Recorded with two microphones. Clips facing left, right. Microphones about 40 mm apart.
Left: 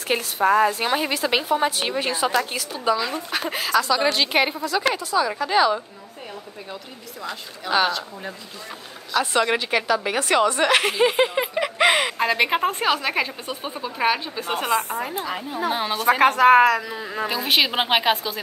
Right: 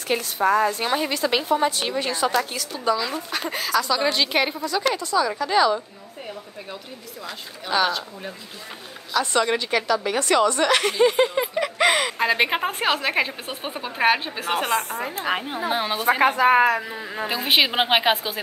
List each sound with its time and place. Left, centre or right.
0.1 s a woman's voice: centre
9.1 s a woman's voice: centre
12.2 s a woman's voice: centre; by 14.4 s right
14.4 s a woman's voice: right
15.7 s a woman's voice: centre
16.1 s a woman's voice: left
17.3 s a woman's voice: centre